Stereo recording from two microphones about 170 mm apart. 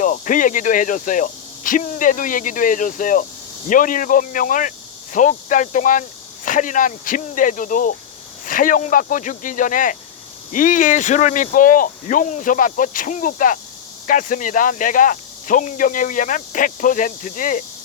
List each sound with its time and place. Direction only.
0.0 s speech: 50° left (ahead or behind)